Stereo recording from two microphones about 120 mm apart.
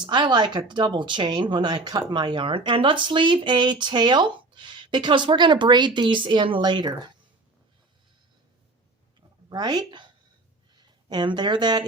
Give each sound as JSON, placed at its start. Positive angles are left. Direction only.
{"t": 0.0, "sound": "speech", "side_deg": -40}
{"t": 9.5, "sound": "speech", "side_deg": -35}